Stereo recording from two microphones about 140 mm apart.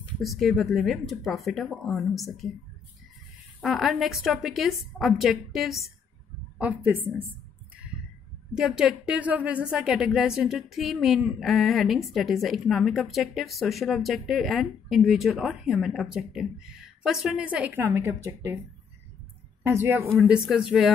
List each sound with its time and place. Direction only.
0.2 s speech: centre (ahead or behind)
3.6 s speech: centre (ahead or behind)
6.6 s speech: 10° right (ahead or behind)
8.5 s speech: 5° right (ahead or behind); by 18.6 s 20° right (ahead or behind)
19.6 s speech: 20° right (ahead or behind)
20.2 s speech: 5° right (ahead or behind)